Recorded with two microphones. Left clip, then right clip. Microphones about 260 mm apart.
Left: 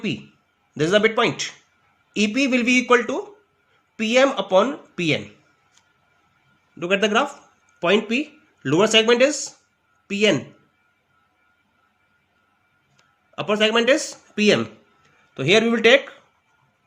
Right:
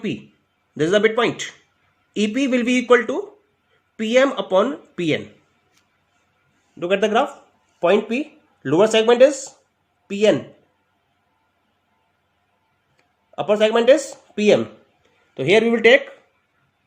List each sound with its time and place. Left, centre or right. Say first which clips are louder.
0.0 s speech: even; centre
6.7 s speech: right 1 dB; centre
13.3 s speech: right 2 dB; centre
15.4 s speech: right 2 dB; left